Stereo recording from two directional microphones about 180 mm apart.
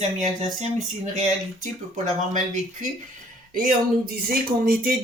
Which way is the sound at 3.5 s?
50° right (ahead or behind).